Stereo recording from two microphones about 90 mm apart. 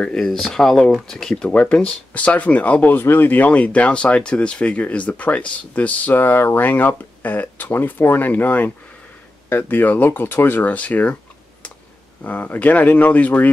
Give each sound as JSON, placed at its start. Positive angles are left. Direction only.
{"t": 0.0, "sound": "speech", "side_deg": 10}
{"t": 12.2, "sound": "speech", "side_deg": 20}